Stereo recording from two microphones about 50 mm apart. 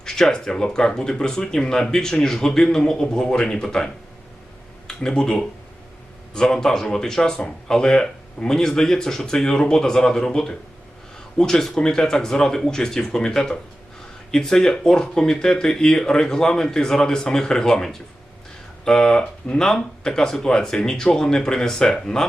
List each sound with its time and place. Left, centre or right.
0.0 s a man's voice: centre
4.9 s a man's voice: centre